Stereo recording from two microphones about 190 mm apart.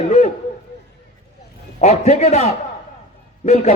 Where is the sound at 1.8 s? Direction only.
35° left (ahead or behind).